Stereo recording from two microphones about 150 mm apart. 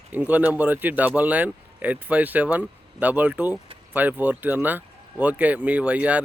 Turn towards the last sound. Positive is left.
turn(degrees=-10)  # may be behind; listen again after turning